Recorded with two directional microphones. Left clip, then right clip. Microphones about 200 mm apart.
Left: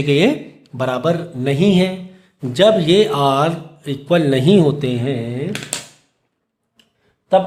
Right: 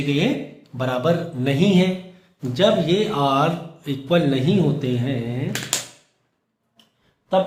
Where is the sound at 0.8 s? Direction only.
30° left (ahead or behind).